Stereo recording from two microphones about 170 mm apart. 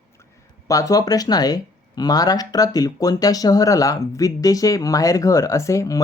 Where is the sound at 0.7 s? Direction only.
20° left (ahead or behind).